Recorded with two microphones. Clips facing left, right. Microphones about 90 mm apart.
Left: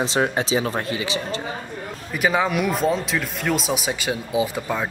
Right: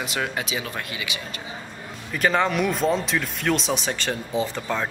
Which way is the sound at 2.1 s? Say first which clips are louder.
Left 1 dB; 5° left (ahead or behind).